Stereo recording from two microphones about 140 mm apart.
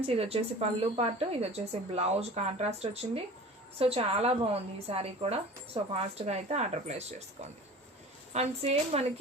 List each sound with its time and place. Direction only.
0.0 s a woman's voice: 45° right (ahead or behind)
8.3 s a woman's voice: 50° right (ahead or behind)